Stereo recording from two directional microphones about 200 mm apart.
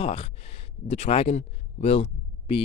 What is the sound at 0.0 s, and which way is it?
Speech, 30° left (ahead or behind).